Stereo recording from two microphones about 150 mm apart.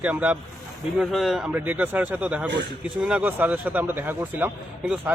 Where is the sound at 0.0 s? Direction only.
10° right (ahead or behind).